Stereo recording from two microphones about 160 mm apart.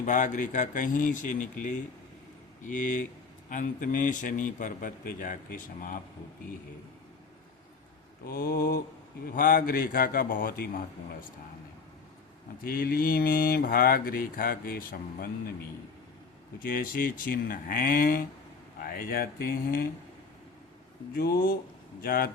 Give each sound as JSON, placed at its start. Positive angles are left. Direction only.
{"t": 0.0, "sound": "a man's voice", "side_deg": 55}
{"t": 8.3, "sound": "speech", "side_deg": 70}
{"t": 9.3, "sound": "a man's voice", "side_deg": 60}
{"t": 12.6, "sound": "speech", "side_deg": 65}
{"t": 16.6, "sound": "a man's voice", "side_deg": 65}
{"t": 21.2, "sound": "speech", "side_deg": 70}